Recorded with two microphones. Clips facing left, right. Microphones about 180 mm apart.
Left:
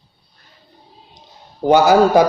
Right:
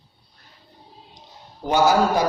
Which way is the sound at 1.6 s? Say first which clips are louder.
Left 6 dB; 65° left (ahead or behind).